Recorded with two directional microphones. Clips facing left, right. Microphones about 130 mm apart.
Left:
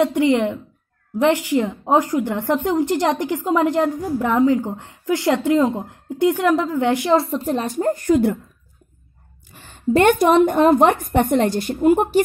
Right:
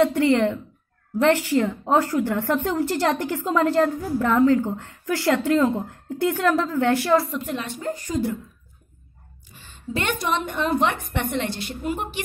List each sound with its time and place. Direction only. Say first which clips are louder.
0.0 s a woman's voice: left 1 dB; 15° left (ahead or behind); by 8.4 s 60° left (ahead or behind)
9.5 s a woman's voice: left 12 dB; 50° left (ahead or behind)